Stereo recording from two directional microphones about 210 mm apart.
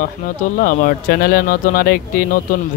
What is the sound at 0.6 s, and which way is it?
Speech, 40° left (ahead or behind).